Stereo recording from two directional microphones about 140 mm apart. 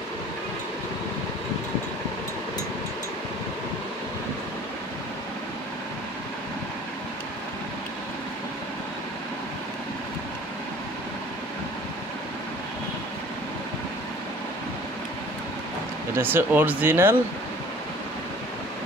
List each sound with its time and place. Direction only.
16.2 s speech: 15° right (ahead or behind)